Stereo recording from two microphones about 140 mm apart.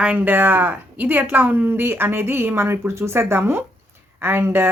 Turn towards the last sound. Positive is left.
turn(degrees=-15)  # may be behind; listen again after turning